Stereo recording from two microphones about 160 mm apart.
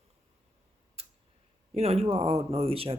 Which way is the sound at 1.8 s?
40° right (ahead or behind).